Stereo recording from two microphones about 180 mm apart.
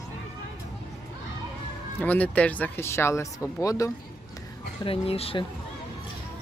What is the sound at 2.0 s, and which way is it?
Speech, 10° left (ahead or behind).